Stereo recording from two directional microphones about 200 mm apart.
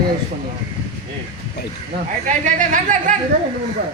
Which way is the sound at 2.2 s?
40° right (ahead or behind).